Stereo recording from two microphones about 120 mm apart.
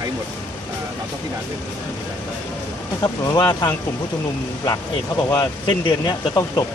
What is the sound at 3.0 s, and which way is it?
Speech, 35° left (ahead or behind).